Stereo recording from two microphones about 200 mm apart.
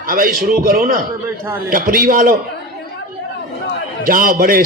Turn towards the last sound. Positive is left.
turn(degrees=-45)  # may be behind; listen again after turning